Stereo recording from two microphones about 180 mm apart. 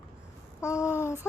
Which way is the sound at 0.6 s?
15° left (ahead or behind).